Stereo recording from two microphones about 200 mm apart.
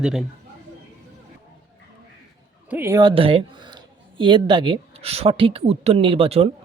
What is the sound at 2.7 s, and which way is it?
Speech, 10° right (ahead or behind).